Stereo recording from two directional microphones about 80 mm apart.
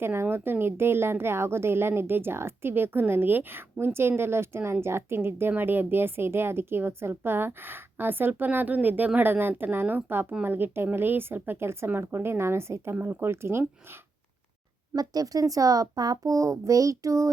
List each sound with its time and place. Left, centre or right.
0.0 s a woman's voice: right
14.9 s a child's voice: right